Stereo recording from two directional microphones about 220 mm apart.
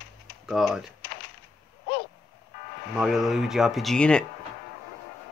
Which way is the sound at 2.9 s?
Centre (ahead or behind).